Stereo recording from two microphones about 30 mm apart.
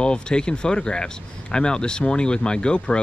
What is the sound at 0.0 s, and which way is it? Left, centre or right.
Speech, left.